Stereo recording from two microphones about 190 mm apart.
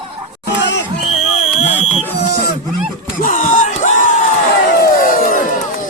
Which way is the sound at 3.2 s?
45° left (ahead or behind).